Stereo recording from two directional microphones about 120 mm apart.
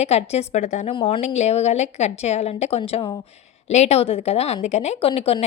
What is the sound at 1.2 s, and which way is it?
A woman's voice, 70° left (ahead or behind).